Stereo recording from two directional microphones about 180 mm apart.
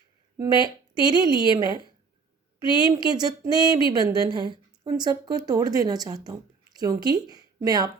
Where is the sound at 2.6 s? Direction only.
30° left (ahead or behind).